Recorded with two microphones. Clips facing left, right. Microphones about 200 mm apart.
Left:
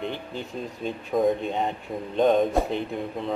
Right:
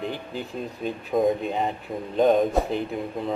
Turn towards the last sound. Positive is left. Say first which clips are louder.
# right 1 dB
turn(degrees=0)  # may be behind; listen again after turning